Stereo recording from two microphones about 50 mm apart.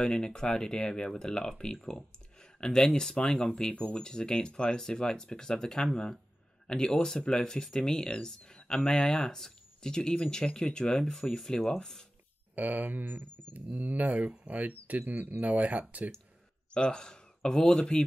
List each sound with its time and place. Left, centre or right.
0.0 s speech: centre
2.0 s a sound: centre
3.0 s speech: centre
12.5 s speech: right
16.7 s speech: centre